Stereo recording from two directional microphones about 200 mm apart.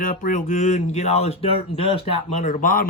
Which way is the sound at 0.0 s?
40° left (ahead or behind).